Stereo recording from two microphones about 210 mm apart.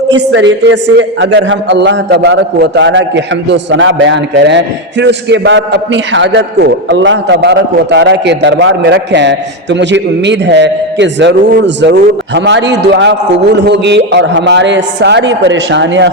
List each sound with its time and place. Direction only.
0.1 s a man's voice: 60° right (ahead or behind)